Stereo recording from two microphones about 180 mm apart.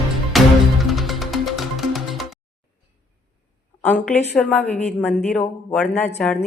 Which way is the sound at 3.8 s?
10° left (ahead or behind).